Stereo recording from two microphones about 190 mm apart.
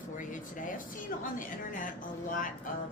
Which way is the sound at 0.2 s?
45° left (ahead or behind).